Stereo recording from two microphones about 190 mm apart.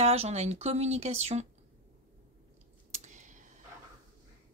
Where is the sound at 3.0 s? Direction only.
40° right (ahead or behind).